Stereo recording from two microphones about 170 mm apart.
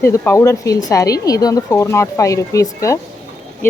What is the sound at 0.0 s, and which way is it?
Speech, 15° left (ahead or behind).